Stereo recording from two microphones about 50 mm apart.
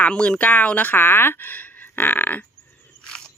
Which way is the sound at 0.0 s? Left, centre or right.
Left.